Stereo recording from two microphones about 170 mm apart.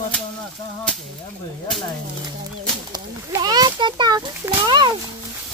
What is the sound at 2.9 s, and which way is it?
A child's voice, 25° right (ahead or behind).